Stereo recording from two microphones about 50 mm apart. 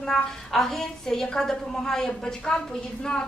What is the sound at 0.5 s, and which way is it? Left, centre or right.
A woman's voice, centre.